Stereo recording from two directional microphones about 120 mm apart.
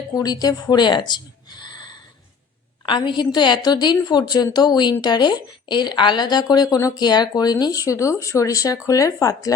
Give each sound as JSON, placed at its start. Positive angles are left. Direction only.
{"t": 0.1, "sound": "speech", "side_deg": 30}
{"t": 2.8, "sound": "a woman's voice", "side_deg": 40}